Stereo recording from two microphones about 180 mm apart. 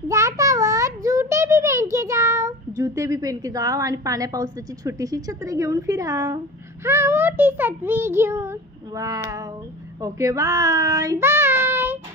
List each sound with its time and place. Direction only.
0.1 s a child's voice: 15° right (ahead or behind)
10.0 s child singing: 15° right (ahead or behind)